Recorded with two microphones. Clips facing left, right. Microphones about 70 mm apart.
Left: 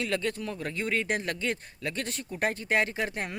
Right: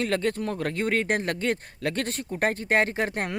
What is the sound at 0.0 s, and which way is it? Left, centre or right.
Speech, right.